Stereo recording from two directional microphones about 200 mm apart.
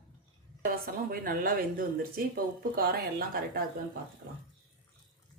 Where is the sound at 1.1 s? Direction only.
45° right (ahead or behind).